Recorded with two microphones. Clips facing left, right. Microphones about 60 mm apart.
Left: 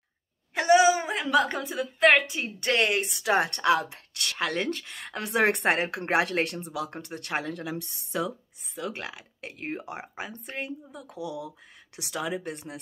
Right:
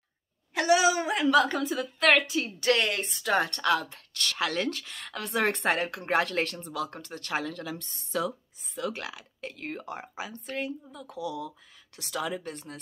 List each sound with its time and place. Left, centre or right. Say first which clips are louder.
0.6 s a sound: left 3 dB; centre
1.4 s speech: right 1 dB; centre
4.4 s speech: left 1 dB; centre
5.1 s speech: left 3 dB; left; by 9.5 s centre
9.6 s speech: left 3 dB; left
11.1 s speech: right 1 dB; centre